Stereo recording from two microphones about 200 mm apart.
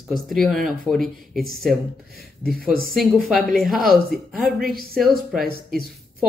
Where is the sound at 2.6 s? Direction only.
45° right (ahead or behind).